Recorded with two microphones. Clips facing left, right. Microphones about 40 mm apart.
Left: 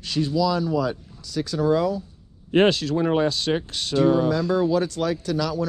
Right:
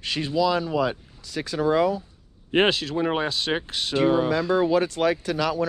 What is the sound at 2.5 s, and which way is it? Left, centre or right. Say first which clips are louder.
Speech: left 2 dB; centre.